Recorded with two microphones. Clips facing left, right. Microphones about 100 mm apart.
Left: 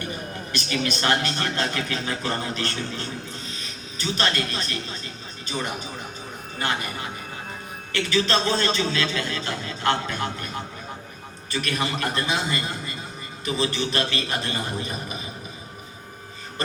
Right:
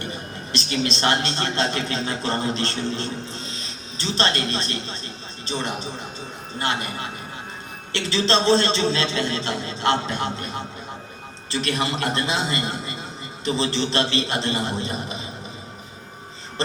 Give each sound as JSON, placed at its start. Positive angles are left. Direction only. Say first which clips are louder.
{"t": 0.5, "sound": "a man's voice", "louder": "right 2 dB", "side_deg": -30}
{"t": 7.9, "sound": "a man's voice", "louder": "right 1 dB", "side_deg": -25}